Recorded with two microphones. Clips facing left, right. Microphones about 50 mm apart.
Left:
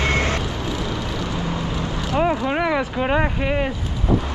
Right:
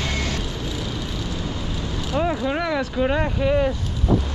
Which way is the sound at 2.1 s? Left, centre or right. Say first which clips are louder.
Left 2 dB; centre.